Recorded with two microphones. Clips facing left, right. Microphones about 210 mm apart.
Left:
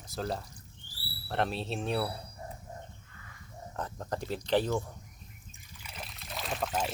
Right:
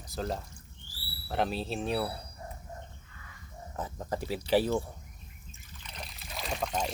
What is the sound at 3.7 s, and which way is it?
Speech, 5° right (ahead or behind).